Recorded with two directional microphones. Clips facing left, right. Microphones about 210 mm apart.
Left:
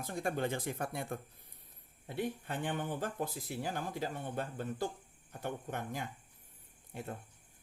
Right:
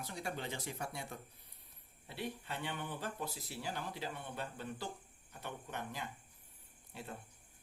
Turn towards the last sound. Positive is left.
turn(degrees=50)  # may be behind; listen again after turning